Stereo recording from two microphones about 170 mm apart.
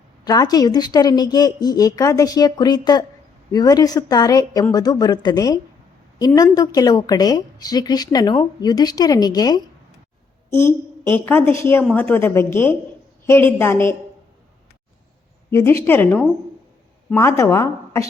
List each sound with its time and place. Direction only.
0.3 s a woman's voice: 20° left (ahead or behind)
15.4 s a woman's voice: 15° left (ahead or behind)